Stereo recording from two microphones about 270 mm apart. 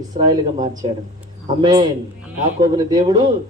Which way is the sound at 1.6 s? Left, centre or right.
Centre.